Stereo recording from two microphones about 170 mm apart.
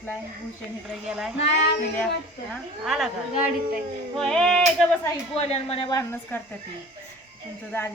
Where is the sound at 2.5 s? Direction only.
Centre (ahead or behind).